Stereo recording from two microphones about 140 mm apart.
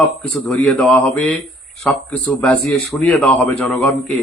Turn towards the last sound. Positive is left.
turn(degrees=10)  # may be behind; listen again after turning